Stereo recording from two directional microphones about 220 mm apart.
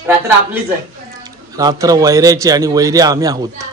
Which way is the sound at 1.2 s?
15° right (ahead or behind).